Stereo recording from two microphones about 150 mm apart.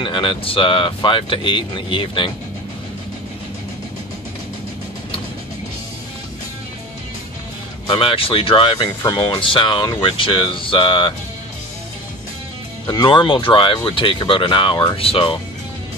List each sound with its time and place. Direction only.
0.0 s speech: 35° left (ahead or behind)
7.8 s speech: 30° left (ahead or behind)
12.8 s speech: 30° left (ahead or behind)